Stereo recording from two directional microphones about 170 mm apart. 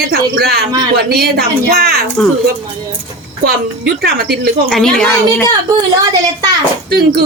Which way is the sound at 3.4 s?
80° right.